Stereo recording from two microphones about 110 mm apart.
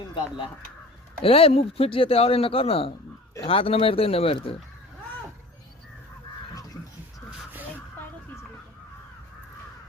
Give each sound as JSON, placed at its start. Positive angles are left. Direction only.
{"t": 0.1, "sound": "speech", "side_deg": 45}
{"t": 1.2, "sound": "speech", "side_deg": 60}